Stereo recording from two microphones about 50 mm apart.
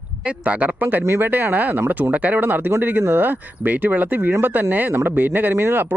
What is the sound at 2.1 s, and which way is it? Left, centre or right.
Speech, right.